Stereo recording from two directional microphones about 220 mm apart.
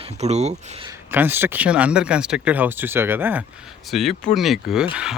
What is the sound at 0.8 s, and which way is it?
Speech, 10° right (ahead or behind).